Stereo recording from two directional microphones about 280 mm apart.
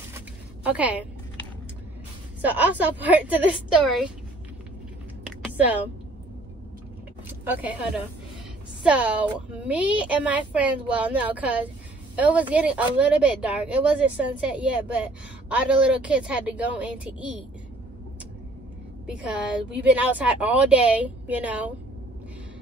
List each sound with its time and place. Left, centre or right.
0.7 s speech: centre
2.4 s speech: centre
7.4 s speech: centre
19.0 s speech: centre